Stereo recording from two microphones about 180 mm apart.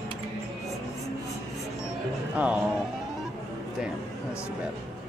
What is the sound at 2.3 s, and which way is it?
Speech, 10° right (ahead or behind).